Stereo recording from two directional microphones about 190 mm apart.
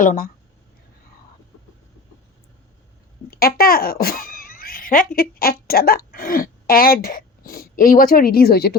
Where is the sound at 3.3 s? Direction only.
50° left (ahead or behind).